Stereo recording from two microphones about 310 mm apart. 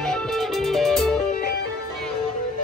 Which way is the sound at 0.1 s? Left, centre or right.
Centre.